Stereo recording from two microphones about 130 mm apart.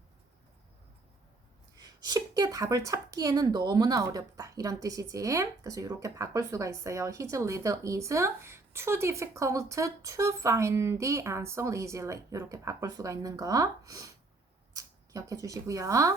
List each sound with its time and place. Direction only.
1.7 s a woman's voice: 30° right (ahead or behind)